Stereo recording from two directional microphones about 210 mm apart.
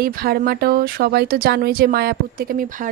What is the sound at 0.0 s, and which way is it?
Speech, 45° right (ahead or behind).